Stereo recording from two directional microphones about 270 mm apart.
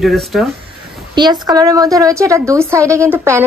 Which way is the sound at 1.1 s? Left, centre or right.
Centre.